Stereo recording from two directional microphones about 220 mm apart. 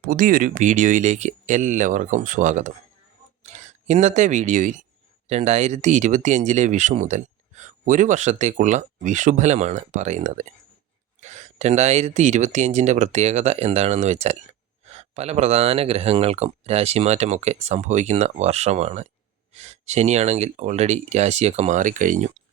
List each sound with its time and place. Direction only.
0.0 s speech: 40° right (ahead or behind)